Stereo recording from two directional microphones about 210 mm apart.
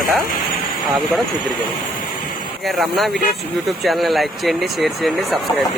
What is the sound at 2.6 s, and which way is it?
Speech, centre (ahead or behind).